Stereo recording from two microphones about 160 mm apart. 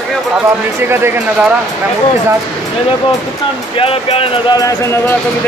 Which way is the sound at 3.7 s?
35° left (ahead or behind).